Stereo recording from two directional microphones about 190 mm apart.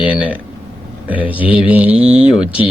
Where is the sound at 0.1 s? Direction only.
5° right (ahead or behind).